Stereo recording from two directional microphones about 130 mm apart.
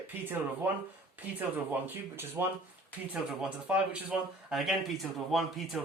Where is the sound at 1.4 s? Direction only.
15° right (ahead or behind).